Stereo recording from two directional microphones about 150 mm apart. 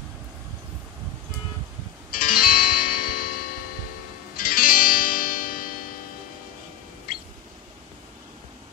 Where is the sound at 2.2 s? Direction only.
70° left (ahead or behind).